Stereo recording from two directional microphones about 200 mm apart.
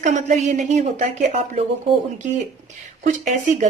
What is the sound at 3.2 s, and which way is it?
Speech, 35° right (ahead or behind).